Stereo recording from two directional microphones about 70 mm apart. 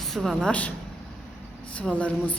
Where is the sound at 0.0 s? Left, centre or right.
Centre.